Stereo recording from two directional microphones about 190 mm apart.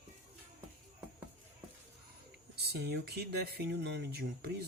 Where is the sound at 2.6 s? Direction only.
60° right (ahead or behind).